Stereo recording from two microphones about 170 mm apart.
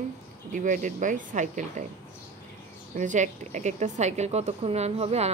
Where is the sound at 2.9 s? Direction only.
45° right (ahead or behind).